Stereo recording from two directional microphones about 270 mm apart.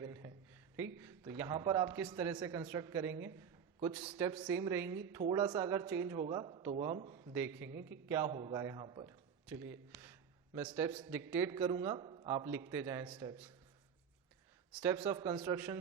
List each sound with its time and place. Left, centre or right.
0.0 s a sound: centre
0.9 s a man's voice: centre
4.4 s a woman's voice: centre
14.7 s a man's voice: centre